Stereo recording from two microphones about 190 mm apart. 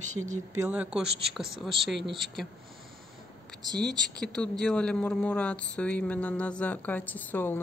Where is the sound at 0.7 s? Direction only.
5° right (ahead or behind).